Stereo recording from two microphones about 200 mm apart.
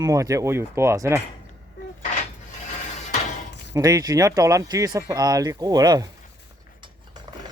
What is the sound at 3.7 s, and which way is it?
A man's voice, 15° right (ahead or behind).